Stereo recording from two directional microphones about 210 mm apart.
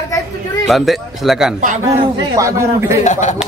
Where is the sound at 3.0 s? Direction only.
35° left (ahead or behind).